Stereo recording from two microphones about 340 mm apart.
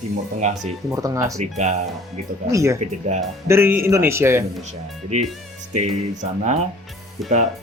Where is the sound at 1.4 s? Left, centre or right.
Right.